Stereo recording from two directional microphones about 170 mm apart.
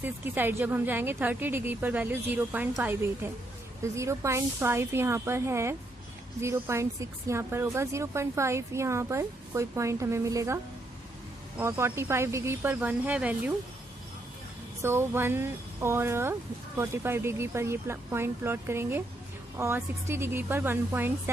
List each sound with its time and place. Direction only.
0.0 s speech: 10° right (ahead or behind)
11.6 s speech: 15° right (ahead or behind)
14.8 s speech: 15° right (ahead or behind)